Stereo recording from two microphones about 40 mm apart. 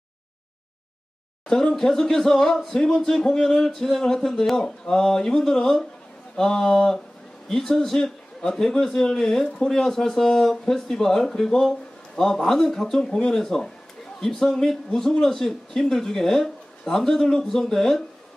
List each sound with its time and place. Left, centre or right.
1.5 s a man's voice: centre
7.7 s a man's voice: centre